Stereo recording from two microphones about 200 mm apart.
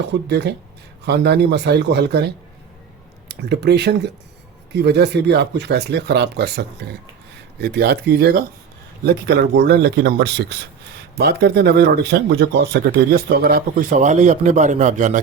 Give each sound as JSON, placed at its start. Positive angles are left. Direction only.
{"t": 0.0, "sound": "speech", "side_deg": -60}